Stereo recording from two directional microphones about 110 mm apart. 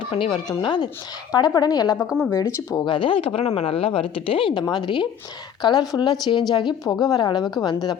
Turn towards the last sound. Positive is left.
turn(degrees=40)  # may be behind; listen again after turning